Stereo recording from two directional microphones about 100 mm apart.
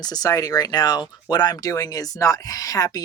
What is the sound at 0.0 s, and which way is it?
Speech, 40° left (ahead or behind).